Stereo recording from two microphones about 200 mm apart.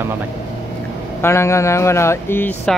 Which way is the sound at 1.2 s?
15° left (ahead or behind).